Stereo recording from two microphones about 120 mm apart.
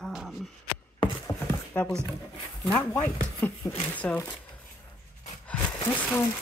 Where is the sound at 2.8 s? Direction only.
20° left (ahead or behind).